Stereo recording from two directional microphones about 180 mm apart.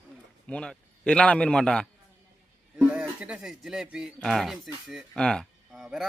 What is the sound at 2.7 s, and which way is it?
Speech, 5° right (ahead or behind).